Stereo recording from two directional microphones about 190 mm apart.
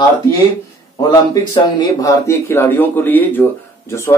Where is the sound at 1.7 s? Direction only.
15° left (ahead or behind).